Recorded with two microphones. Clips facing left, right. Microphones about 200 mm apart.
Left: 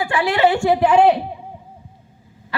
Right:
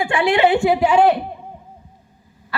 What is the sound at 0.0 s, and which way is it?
Speech, 25° right (ahead or behind).